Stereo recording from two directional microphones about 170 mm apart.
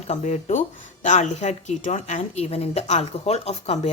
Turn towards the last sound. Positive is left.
turn(degrees=40)  # may be behind; listen again after turning